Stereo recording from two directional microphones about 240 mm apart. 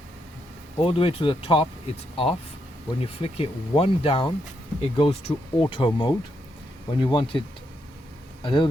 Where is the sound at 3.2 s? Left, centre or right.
Left.